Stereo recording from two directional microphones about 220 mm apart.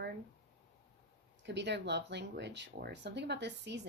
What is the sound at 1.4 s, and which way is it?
Speech, 50° right (ahead or behind).